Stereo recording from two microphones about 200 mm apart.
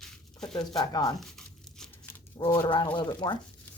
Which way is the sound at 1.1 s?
Centre (ahead or behind).